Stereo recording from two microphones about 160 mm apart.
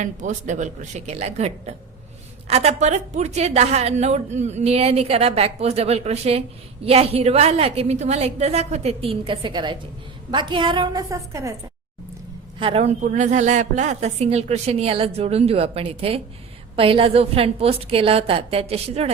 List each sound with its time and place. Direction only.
0.0 s a woman's voice: 50° right (ahead or behind); by 11.5 s 20° right (ahead or behind)
12.5 s a woman's voice: 35° right (ahead or behind)